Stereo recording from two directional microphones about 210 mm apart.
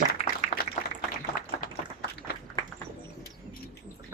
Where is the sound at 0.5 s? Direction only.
30° left (ahead or behind).